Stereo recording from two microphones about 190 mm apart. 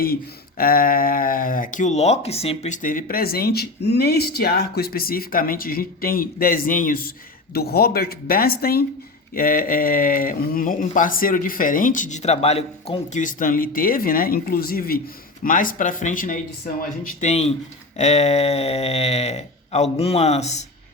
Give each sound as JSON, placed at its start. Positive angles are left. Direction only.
{"t": 0.0, "sound": "speech", "side_deg": 50}